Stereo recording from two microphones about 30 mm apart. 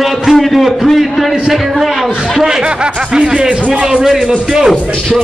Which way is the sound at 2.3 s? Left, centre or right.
Right.